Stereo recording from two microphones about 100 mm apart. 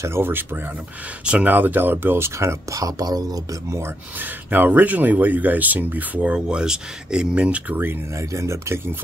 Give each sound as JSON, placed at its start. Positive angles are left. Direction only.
{"t": 0.0, "sound": "speech", "side_deg": -25}
{"t": 3.8, "sound": "speech", "side_deg": -20}
{"t": 8.2, "sound": "speech", "side_deg": -30}